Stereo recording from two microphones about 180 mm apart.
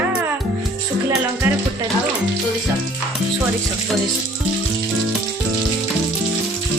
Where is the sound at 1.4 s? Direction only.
10° right (ahead or behind).